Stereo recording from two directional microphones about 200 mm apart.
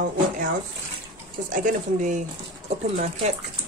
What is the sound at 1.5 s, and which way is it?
Speech, 40° right (ahead or behind).